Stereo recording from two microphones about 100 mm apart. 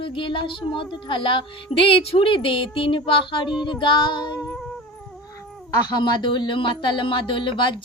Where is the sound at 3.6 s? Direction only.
55° left (ahead or behind).